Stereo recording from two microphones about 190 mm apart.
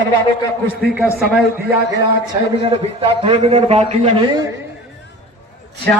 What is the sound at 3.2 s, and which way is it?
A man's voice, 30° right (ahead or behind).